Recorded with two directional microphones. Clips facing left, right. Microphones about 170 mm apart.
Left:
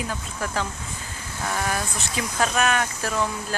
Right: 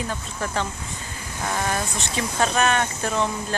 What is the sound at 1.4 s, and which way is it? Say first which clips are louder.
Speech: right 1 dB; 15° right (ahead or behind).